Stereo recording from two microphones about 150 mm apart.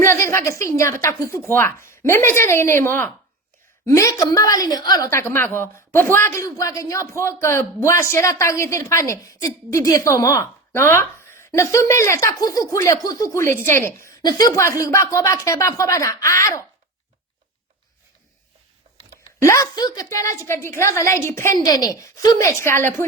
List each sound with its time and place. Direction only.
0.0 s a woman's voice: 15° left (ahead or behind)
19.4 s a woman's voice: 20° left (ahead or behind)